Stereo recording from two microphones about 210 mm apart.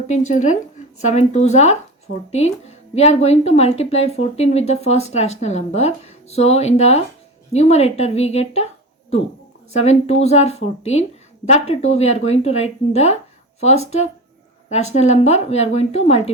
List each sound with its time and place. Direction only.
0.1 s speech: 35° left (ahead or behind)
9.7 s a woman's voice: 30° left (ahead or behind)